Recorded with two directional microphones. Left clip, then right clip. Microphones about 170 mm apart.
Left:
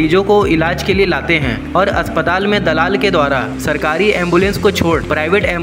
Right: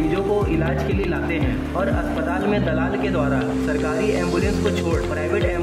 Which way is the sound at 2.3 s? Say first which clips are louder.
Left 8 dB; 20° left (ahead or behind).